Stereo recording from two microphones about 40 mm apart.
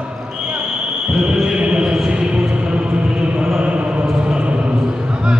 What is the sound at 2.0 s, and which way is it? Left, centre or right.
Music, right.